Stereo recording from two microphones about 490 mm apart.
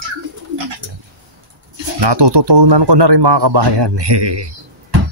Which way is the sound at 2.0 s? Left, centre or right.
Right.